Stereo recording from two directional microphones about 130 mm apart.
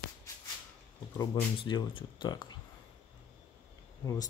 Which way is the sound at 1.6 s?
40° left (ahead or behind).